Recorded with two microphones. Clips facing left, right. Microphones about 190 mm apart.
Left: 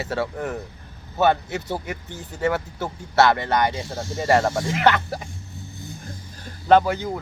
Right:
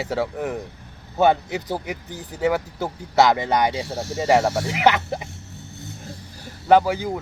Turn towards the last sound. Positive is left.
turn(degrees=-10)  # may be behind; listen again after turning